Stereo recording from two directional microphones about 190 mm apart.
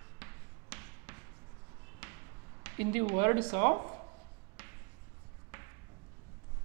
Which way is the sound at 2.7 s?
15° right (ahead or behind).